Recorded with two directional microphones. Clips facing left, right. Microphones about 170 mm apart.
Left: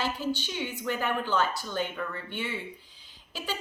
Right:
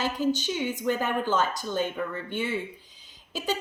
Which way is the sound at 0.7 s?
45° right (ahead or behind).